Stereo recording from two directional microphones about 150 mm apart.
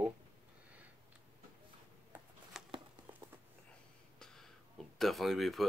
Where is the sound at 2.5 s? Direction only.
5° right (ahead or behind).